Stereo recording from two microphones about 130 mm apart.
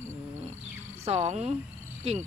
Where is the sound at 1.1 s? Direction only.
60° right (ahead or behind).